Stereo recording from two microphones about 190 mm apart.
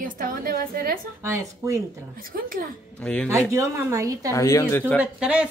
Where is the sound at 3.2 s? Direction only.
15° right (ahead or behind).